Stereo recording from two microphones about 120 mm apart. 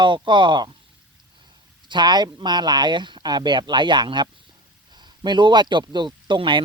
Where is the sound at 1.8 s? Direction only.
40° right (ahead or behind).